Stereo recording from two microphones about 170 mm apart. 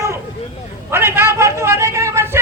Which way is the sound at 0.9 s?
15° right (ahead or behind).